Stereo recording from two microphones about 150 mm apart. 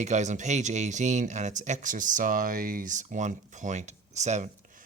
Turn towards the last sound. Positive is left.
turn(degrees=-50)  # may be behind; listen again after turning